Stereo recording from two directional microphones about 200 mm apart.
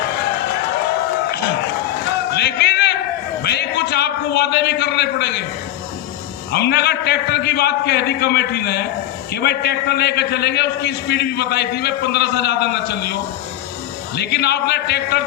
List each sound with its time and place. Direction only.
2.3 s a sound: 55° left (ahead or behind)
6.5 s a man's voice: 55° left (ahead or behind)
14.2 s a man's voice: 55° left (ahead or behind)